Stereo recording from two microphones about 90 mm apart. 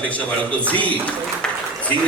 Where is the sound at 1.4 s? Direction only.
10° left (ahead or behind).